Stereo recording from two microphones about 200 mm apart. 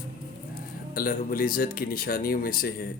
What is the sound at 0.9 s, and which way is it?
Speech, 45° left (ahead or behind).